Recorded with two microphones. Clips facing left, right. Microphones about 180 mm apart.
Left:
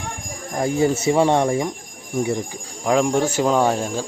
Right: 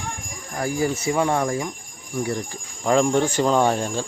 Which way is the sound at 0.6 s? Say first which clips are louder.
Left 4 dB; 25° left (ahead or behind).